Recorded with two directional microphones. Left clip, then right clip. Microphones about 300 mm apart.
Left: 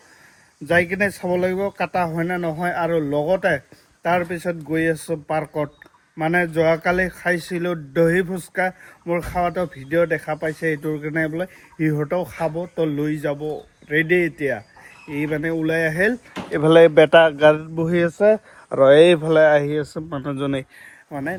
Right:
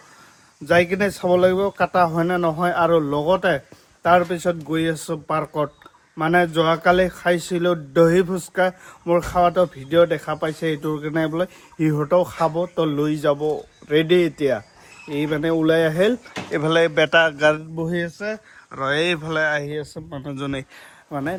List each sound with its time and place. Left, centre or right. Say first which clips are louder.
0.6 s speech: right 1 dB; centre
6.7 s speech: right 2 dB; right
7.1 s speech: right 2 dB; centre
10.1 s speech: left 1 dB; right
10.3 s speech: left 1 dB; centre